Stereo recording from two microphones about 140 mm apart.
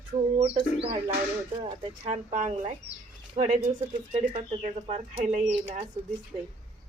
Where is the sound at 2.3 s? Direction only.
65° right (ahead or behind).